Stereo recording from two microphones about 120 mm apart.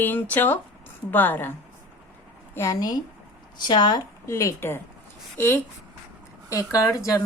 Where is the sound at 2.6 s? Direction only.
30° left (ahead or behind).